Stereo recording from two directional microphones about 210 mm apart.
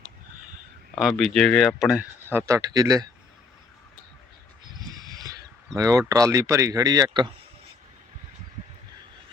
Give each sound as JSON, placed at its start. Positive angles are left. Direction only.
{"t": 0.9, "sound": "speech", "side_deg": 0}
{"t": 4.7, "sound": "a sound", "side_deg": -20}
{"t": 5.7, "sound": "speech", "side_deg": -15}